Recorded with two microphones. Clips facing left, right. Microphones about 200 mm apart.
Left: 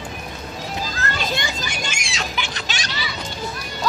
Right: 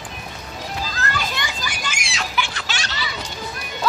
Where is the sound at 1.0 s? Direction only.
25° left (ahead or behind).